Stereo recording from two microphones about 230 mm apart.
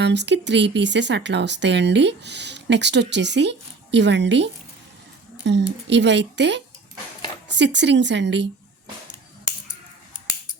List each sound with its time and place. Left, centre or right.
0.0 s speech: right